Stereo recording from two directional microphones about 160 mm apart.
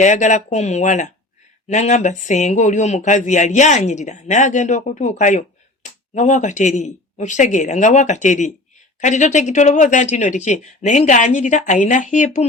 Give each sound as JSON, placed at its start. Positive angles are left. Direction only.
{"t": 0.0, "sound": "speech", "side_deg": 50}